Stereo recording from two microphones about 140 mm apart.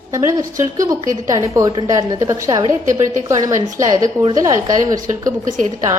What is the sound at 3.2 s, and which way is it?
A woman's voice, 20° right (ahead or behind).